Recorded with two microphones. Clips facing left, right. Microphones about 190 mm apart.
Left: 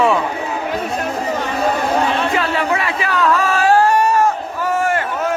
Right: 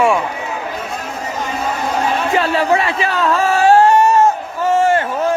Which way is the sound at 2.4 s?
30° right (ahead or behind).